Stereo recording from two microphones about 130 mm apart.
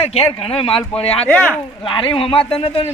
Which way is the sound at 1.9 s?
40° left (ahead or behind).